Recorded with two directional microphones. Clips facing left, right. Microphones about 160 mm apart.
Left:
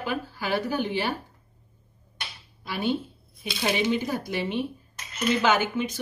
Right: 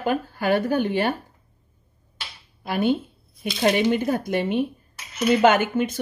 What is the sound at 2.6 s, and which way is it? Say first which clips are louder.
Speech: right 5 dB; 50° right (ahead or behind).